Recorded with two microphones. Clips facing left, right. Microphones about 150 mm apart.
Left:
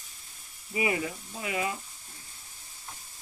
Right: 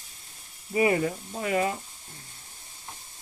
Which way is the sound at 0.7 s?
40° right (ahead or behind).